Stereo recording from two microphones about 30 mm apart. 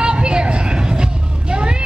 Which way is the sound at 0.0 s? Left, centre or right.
Right.